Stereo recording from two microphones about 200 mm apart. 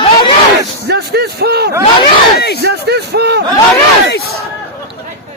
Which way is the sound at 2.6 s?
55° right (ahead or behind).